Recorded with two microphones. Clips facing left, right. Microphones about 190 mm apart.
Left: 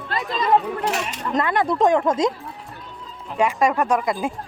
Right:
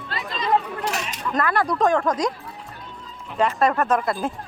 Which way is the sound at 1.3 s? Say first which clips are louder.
Left 2 dB; 20° left (ahead or behind).